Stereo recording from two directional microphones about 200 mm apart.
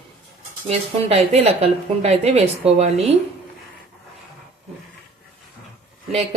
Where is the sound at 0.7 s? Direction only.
30° right (ahead or behind).